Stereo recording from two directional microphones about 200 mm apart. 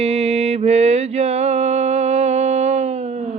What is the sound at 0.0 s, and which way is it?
Mantra, 30° right (ahead or behind).